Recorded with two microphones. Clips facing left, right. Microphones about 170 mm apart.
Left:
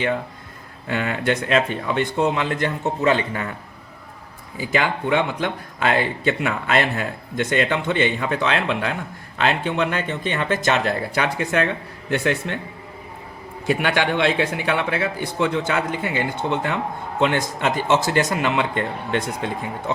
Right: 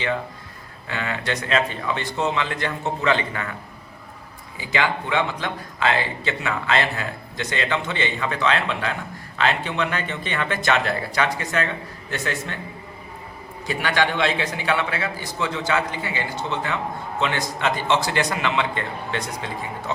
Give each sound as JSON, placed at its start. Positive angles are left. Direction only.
{"t": 0.9, "sound": "a man's voice", "side_deg": 50}
{"t": 4.6, "sound": "a man's voice", "side_deg": 45}
{"t": 13.7, "sound": "a man's voice", "side_deg": 55}